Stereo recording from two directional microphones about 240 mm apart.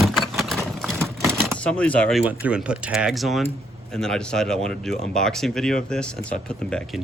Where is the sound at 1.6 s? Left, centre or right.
Centre.